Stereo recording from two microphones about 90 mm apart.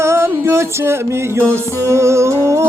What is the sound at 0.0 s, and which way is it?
Music, 30° right (ahead or behind).